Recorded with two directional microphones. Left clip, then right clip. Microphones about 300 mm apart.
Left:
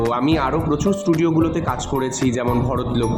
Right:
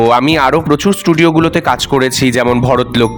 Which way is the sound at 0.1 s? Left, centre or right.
Right.